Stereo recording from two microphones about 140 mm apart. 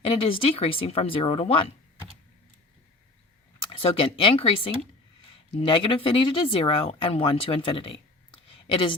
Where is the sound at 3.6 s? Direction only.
40° left (ahead or behind).